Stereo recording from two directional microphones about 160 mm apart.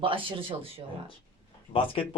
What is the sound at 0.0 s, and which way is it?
Speech, 35° right (ahead or behind).